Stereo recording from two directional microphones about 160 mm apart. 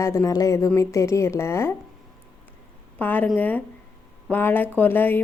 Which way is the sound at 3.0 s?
10° left (ahead or behind).